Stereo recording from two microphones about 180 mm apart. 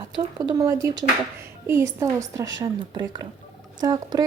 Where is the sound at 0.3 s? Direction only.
20° right (ahead or behind).